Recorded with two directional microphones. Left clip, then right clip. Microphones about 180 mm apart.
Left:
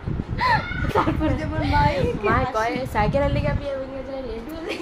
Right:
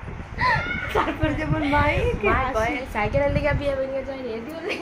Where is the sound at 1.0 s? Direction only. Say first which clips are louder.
Left 2 dB; 60° left (ahead or behind).